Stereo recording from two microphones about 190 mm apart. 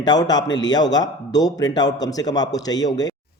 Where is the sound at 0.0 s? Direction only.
20° left (ahead or behind).